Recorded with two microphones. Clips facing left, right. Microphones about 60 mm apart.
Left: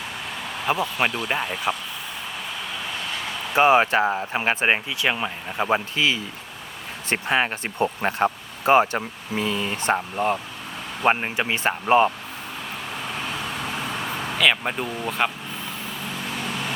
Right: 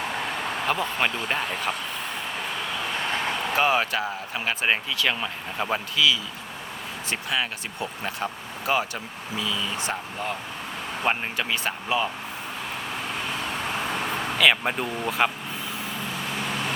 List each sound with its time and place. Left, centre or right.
0.7 s speech: centre
3.1 s vehicle: right
3.5 s speech: left
6.0 s speech: left
11.0 s speech: left
14.3 s speech: centre